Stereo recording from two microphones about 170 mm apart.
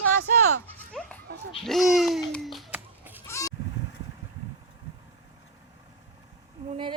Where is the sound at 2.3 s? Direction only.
Centre (ahead or behind).